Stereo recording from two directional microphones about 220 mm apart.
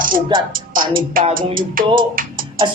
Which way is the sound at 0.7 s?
40° right (ahead or behind).